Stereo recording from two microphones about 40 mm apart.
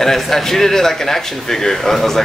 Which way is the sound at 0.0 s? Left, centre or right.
Centre.